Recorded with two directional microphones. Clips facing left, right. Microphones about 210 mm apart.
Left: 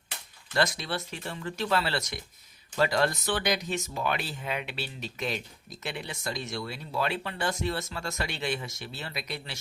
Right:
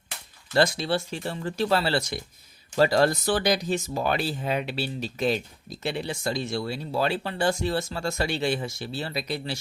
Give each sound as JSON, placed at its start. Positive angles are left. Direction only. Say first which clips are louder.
{"t": 0.5, "sound": "speech", "louder": "right 6 dB", "side_deg": -30}